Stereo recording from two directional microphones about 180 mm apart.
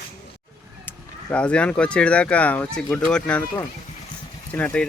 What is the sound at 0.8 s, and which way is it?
Speech, 5° left (ahead or behind).